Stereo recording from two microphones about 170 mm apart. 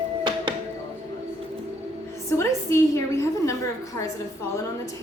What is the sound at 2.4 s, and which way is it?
A woman's voice, 15° left (ahead or behind).